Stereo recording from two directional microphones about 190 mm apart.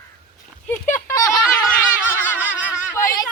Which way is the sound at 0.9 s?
10° left (ahead or behind).